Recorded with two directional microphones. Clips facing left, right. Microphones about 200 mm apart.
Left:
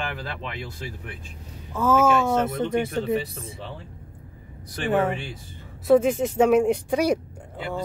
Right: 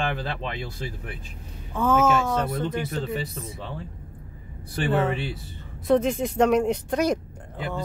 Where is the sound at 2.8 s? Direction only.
25° left (ahead or behind).